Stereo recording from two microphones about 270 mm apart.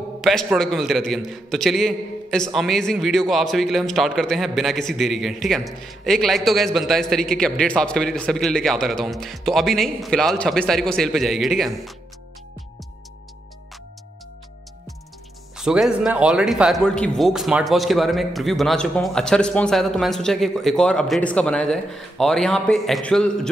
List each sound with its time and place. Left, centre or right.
0.2 s a man's voice: centre
15.5 s a man's voice: centre